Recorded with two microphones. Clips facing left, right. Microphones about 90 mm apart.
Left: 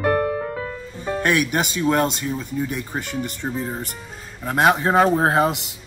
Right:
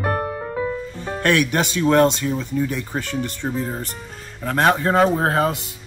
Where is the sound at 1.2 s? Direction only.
10° left (ahead or behind).